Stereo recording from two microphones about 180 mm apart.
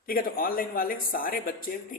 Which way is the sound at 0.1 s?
55° left (ahead or behind).